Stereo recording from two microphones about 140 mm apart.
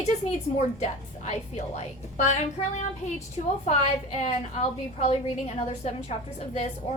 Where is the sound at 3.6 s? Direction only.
55° left (ahead or behind).